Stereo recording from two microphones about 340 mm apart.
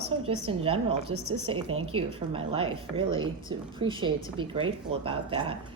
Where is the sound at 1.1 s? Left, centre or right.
Right.